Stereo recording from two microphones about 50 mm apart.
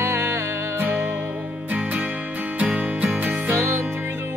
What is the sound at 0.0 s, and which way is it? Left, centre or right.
Music, right.